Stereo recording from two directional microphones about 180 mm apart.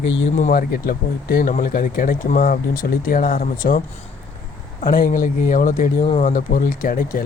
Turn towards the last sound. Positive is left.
turn(degrees=50)  # may be behind; listen again after turning